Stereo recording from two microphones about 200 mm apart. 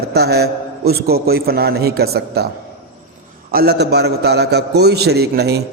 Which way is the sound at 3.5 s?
55° right (ahead or behind).